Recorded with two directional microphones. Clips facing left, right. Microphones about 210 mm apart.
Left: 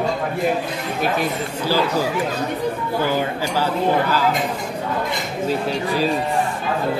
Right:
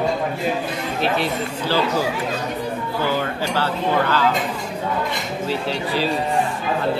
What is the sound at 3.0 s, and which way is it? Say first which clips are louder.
Speech: right 1 dB; 15° left (ahead or behind).